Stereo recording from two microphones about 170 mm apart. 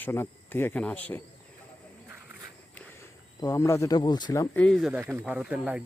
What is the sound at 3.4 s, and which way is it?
Speech, 20° left (ahead or behind).